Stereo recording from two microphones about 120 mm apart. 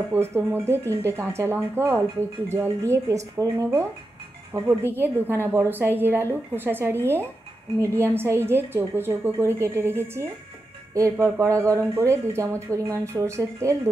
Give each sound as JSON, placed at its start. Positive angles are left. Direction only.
{"t": 0.1, "sound": "speech", "side_deg": -20}
{"t": 4.6, "sound": "a woman's voice", "side_deg": -20}